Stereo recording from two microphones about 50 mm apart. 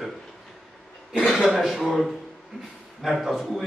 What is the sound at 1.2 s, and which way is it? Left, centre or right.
Speech, centre.